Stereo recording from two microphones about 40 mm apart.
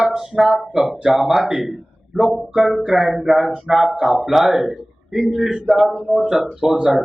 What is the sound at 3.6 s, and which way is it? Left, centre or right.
Speech, centre.